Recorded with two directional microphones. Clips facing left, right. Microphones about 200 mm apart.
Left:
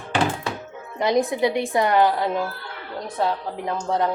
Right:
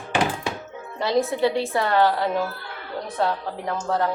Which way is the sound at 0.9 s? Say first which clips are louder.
Left 2 dB; 15° left (ahead or behind).